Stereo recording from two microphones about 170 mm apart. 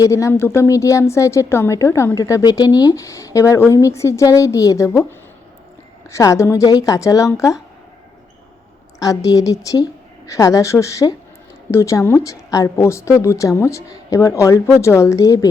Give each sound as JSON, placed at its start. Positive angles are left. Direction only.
{"t": 0.0, "sound": "a woman's voice", "side_deg": 20}
{"t": 6.1, "sound": "a woman's voice", "side_deg": 15}
{"t": 9.0, "sound": "a woman's voice", "side_deg": 20}